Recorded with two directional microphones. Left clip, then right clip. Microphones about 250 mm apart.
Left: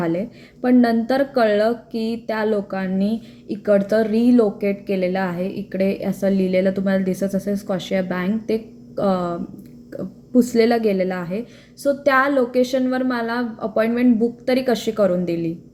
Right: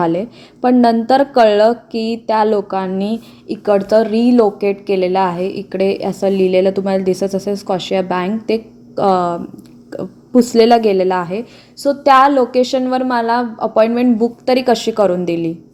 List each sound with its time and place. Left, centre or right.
0.0 s speech: centre
4.2 s a woman's voice: right
4.5 s speech: centre
14.8 s a woman's voice: right